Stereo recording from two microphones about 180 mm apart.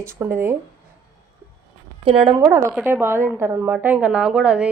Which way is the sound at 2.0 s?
30° right (ahead or behind).